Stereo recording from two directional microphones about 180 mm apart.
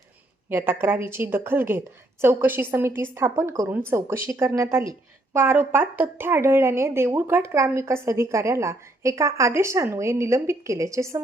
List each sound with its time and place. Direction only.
0.5 s a woman's voice: 10° right (ahead or behind)